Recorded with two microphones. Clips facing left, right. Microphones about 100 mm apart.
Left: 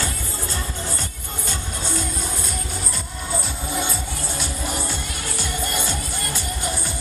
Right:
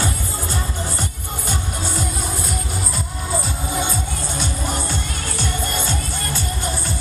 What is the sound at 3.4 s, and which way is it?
Music, centre (ahead or behind).